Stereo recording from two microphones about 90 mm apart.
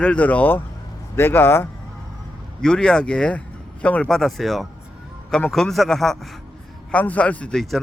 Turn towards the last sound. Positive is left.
turn(degrees=5)  # may be behind; listen again after turning